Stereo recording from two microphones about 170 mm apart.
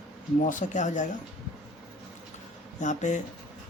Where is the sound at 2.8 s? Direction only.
45° left (ahead or behind).